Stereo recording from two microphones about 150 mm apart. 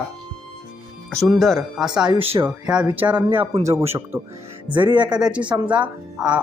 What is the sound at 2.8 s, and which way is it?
Speech, 10° right (ahead or behind).